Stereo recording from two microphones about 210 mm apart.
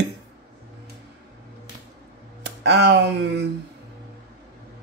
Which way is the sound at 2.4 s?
55° right (ahead or behind).